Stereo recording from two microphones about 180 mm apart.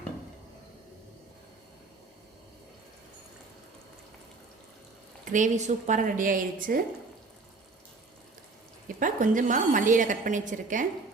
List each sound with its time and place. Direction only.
5.3 s a woman's voice: 45° right (ahead or behind)
9.0 s a woman's voice: 45° right (ahead or behind)